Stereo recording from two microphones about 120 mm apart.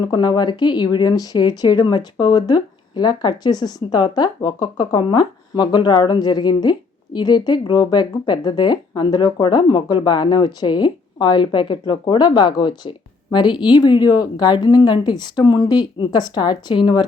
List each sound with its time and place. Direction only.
0.0 s speech: 40° left (ahead or behind)